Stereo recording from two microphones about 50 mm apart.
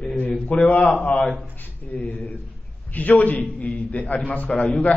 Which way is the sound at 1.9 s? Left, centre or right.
Left.